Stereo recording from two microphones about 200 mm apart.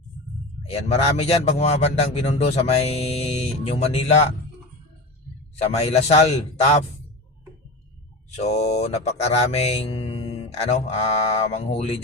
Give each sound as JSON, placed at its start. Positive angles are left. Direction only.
{"t": 0.7, "sound": "mantra", "side_deg": 30}
{"t": 5.7, "sound": "mantra", "side_deg": 30}
{"t": 8.4, "sound": "mantra", "side_deg": 35}